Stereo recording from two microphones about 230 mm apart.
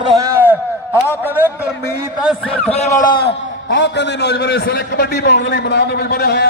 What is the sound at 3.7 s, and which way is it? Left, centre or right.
A man's voice, left.